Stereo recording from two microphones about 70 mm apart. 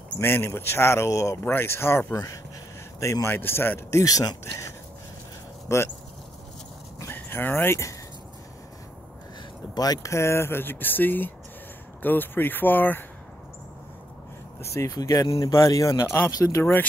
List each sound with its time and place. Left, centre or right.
0.2 s speech: left
1.4 s speech: left
2.1 s speech: left
3.3 s speech: left
4.0 s speech: left
5.7 s speech: left
7.1 s dog: left
9.8 s speech: left
10.1 s speech: left
14.6 s speech: left
14.9 s speech: left